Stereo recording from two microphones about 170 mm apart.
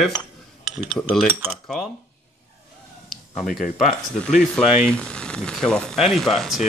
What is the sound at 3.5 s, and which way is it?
Speech, 50° left (ahead or behind).